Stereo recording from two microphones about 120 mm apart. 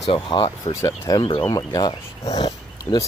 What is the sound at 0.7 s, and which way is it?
Speech, 25° left (ahead or behind).